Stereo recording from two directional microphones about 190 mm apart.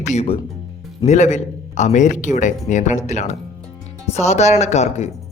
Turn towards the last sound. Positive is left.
turn(degrees=35)  # may be behind; listen again after turning